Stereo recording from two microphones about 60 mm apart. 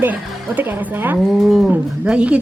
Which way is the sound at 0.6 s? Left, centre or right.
Right.